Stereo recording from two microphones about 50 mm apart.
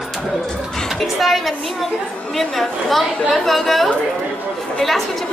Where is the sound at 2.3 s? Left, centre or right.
Centre.